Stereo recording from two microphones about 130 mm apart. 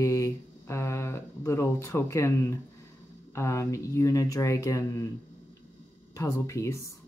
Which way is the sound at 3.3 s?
20° left (ahead or behind).